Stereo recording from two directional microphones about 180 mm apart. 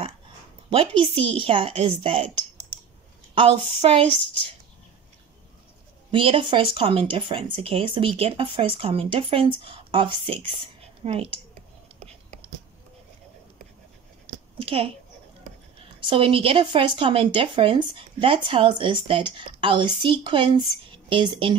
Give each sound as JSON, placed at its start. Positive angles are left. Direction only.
{"t": 0.7, "sound": "speech", "side_deg": -30}
{"t": 3.3, "sound": "speech", "side_deg": -30}
{"t": 6.1, "sound": "speech", "side_deg": -30}
{"t": 14.2, "sound": "a sound", "side_deg": -30}
{"t": 16.1, "sound": "speech", "side_deg": -30}